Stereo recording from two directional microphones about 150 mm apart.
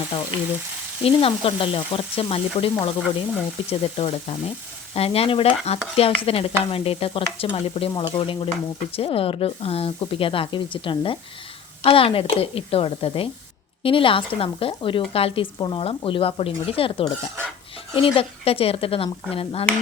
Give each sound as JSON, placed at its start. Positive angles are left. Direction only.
{"t": 0.1, "sound": "frying", "side_deg": 30}
{"t": 1.0, "sound": "speech", "side_deg": 40}